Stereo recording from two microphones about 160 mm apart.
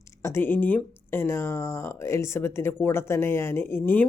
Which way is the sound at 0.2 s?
15° left (ahead or behind).